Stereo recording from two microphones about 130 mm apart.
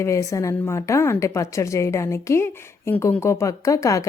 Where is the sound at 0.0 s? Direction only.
25° left (ahead or behind).